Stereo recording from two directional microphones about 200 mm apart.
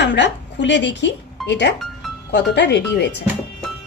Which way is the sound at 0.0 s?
60° left (ahead or behind).